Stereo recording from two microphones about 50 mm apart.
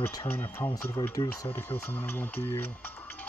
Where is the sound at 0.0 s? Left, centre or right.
Left.